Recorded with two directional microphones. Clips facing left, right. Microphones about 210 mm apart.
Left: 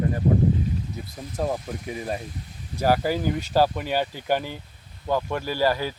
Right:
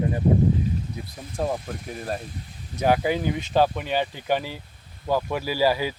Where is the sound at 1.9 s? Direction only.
5° left (ahead or behind).